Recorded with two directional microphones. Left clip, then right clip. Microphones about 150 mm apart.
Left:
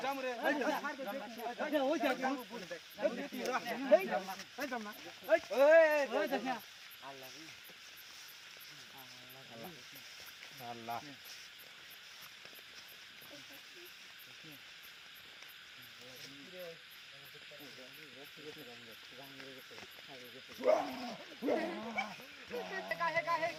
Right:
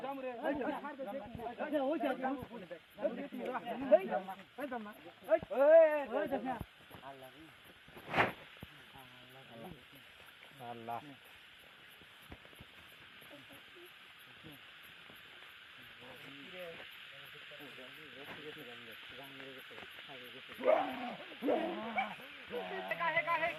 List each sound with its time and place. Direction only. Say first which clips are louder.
0.0 s a sound: left 3 dB; 10° left (ahead or behind)
1.0 s speech: left 2 dB; 10° left (ahead or behind)
5.5 s speech: right 1 dB; 5° right (ahead or behind)
10.6 s speech: even; 20° right (ahead or behind)
20.7 s bow-wow: right 1 dB; 10° left (ahead or behind)